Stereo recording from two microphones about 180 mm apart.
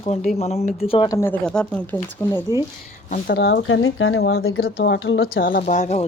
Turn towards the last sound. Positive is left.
turn(degrees=40)  # may be behind; listen again after turning